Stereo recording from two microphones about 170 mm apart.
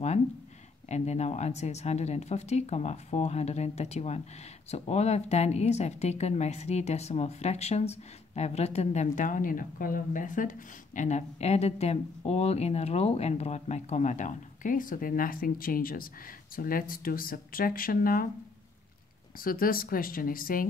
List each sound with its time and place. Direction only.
0.8 s speech: 40° left (ahead or behind); by 18.3 s 55° left (ahead or behind)
19.3 s speech: 55° left (ahead or behind)